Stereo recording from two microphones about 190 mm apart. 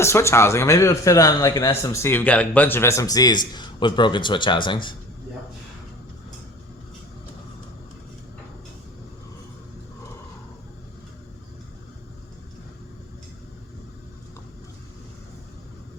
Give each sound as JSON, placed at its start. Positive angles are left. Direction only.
{"t": 0.0, "sound": "a man's voice", "side_deg": 15}